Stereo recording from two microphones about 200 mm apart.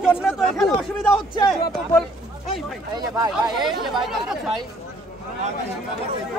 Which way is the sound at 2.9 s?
20° right (ahead or behind).